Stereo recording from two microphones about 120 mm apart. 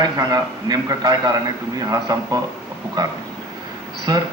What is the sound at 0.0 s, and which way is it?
A man's voice, 35° right (ahead or behind).